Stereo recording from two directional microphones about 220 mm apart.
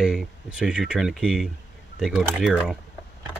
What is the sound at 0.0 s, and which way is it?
Speech, 5° right (ahead or behind).